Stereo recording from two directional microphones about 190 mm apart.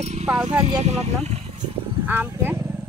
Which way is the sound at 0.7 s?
35° right (ahead or behind).